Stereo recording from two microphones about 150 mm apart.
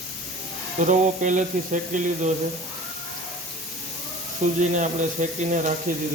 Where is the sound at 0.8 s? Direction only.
55° right (ahead or behind).